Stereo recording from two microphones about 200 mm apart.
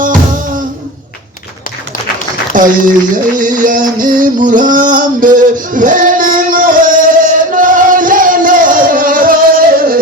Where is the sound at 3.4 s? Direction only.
40° right (ahead or behind).